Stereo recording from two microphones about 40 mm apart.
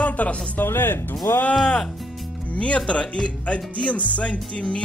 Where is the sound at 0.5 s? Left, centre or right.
Left.